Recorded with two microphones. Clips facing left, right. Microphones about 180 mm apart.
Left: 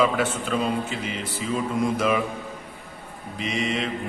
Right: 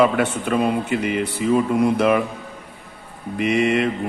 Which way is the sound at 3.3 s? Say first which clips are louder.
Right 9 dB; 60° right (ahead or behind).